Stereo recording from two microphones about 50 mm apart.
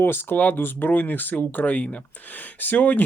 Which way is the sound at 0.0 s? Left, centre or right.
Left.